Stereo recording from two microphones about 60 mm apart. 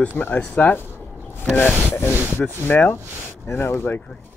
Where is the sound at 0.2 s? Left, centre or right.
Left.